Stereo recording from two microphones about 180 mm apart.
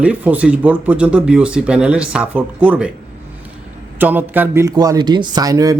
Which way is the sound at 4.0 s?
10° right (ahead or behind).